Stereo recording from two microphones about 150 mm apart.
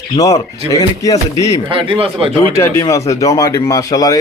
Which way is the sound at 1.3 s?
35° right (ahead or behind).